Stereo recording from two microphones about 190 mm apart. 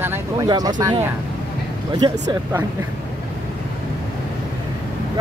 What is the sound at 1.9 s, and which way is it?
Speech, 20° right (ahead or behind).